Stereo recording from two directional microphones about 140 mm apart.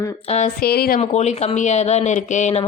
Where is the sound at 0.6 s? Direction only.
90° left.